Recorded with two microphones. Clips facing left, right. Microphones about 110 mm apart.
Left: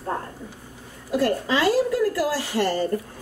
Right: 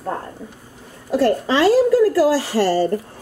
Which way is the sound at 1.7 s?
90° right.